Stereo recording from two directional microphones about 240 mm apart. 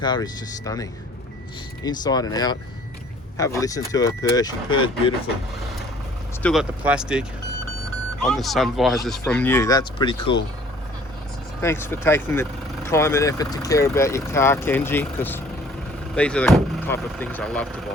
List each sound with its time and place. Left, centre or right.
0.0 s speech: centre
6.4 s speech: centre
11.6 s speech: centre